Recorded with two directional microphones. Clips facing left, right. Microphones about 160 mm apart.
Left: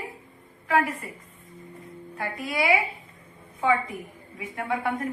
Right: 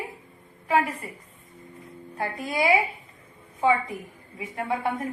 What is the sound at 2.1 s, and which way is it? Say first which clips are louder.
Speech: right 1 dB; 30° right (ahead or behind).